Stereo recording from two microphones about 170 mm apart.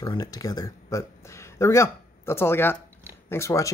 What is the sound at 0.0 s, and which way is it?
Speech, 20° left (ahead or behind).